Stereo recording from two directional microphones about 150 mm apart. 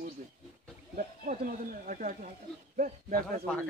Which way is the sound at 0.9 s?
70° right (ahead or behind).